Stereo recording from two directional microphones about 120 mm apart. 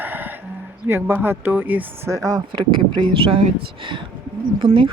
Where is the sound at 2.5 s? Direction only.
40° right (ahead or behind).